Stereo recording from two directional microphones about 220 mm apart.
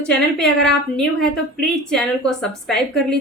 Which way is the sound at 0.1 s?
5° left (ahead or behind).